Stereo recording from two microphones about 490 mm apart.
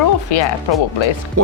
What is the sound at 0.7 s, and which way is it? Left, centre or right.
Speech, left.